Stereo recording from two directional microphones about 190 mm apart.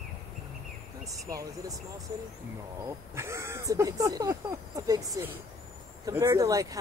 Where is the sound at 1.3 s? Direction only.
20° right (ahead or behind).